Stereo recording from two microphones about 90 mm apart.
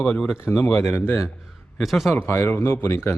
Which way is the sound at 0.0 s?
10° left (ahead or behind).